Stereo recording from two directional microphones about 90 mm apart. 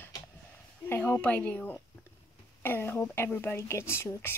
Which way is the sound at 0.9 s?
25° left (ahead or behind).